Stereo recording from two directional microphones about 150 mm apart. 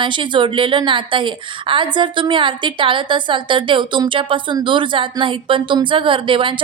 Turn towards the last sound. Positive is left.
turn(degrees=-35)  # may be behind; listen again after turning